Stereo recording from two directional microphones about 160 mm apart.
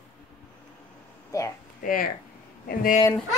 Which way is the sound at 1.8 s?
60° left (ahead or behind).